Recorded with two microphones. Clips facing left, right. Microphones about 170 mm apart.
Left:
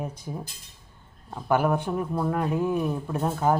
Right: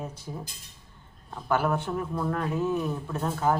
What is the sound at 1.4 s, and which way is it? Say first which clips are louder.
Speech: left 3 dB; 15° left (ahead or behind).